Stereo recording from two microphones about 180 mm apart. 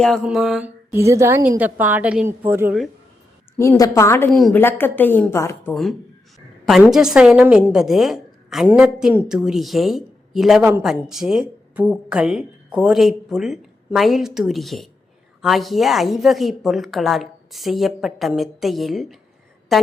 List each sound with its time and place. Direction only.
0.0 s a woman's voice: centre (ahead or behind)
3.6 s a woman's voice: 15° left (ahead or behind)
4.3 s a woman's voice: centre (ahead or behind)
6.9 s a woman's voice: centre (ahead or behind)